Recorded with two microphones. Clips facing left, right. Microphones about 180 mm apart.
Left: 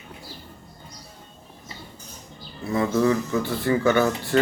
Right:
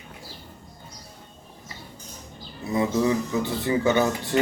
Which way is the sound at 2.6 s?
20° right (ahead or behind).